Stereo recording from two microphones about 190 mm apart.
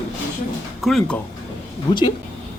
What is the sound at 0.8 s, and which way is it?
Speech, centre (ahead or behind).